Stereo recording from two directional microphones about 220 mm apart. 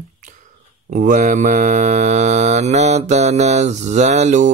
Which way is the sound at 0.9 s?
35° right (ahead or behind).